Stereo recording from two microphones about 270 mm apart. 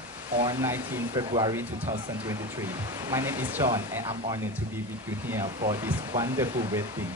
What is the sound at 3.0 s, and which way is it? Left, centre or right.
Speech, centre.